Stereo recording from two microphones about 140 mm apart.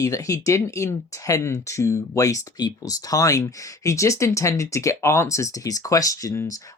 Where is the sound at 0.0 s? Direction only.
25° left (ahead or behind).